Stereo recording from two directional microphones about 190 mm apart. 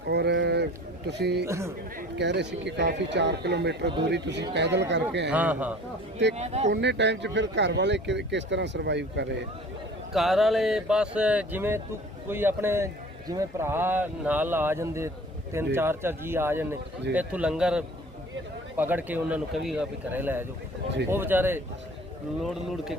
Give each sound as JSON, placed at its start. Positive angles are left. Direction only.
{"t": 0.1, "sound": "a sound", "side_deg": -65}
{"t": 1.5, "sound": "a man's voice", "side_deg": -15}
{"t": 2.0, "sound": "speech", "side_deg": -65}
{"t": 5.3, "sound": "a man's voice", "side_deg": -10}
{"t": 6.3, "sound": "speech", "side_deg": -35}
{"t": 6.7, "sound": "speech", "side_deg": -65}
{"t": 10.1, "sound": "a man's voice", "side_deg": 0}